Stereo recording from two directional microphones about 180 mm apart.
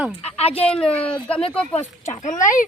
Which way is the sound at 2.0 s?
40° left (ahead or behind).